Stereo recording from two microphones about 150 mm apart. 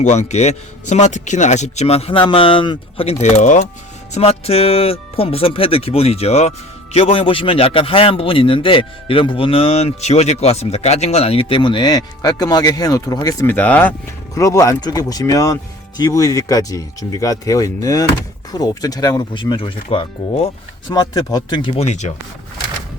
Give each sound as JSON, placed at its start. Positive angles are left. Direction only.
{"t": 0.0, "sound": "a man's voice", "side_deg": 50}
{"t": 4.1, "sound": "a man's voice", "side_deg": 40}
{"t": 14.3, "sound": "speech", "side_deg": 20}
{"t": 20.9, "sound": "a man's voice", "side_deg": 25}